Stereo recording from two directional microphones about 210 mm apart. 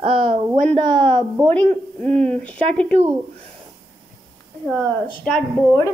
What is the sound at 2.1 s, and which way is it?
Speech, 30° right (ahead or behind).